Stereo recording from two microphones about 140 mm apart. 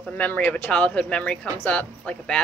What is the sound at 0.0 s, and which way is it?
A woman's voice, 10° left (ahead or behind).